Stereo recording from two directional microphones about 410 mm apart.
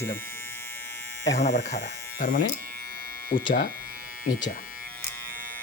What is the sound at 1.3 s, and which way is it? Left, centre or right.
Speech, left.